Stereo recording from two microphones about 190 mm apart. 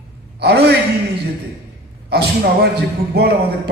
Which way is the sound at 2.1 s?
55° right (ahead or behind).